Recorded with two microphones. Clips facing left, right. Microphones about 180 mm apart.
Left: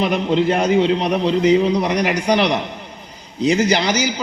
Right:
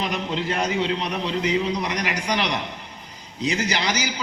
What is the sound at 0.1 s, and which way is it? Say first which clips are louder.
A man's voice: left 9 dB; 30° left (ahead or behind).